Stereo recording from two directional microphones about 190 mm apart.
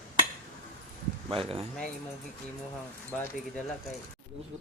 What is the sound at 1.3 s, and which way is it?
Speech, 30° right (ahead or behind).